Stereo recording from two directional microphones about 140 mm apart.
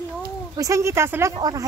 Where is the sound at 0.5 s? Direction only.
20° right (ahead or behind).